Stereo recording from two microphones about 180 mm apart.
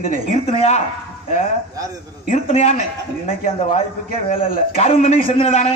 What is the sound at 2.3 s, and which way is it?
Speech, 35° left (ahead or behind).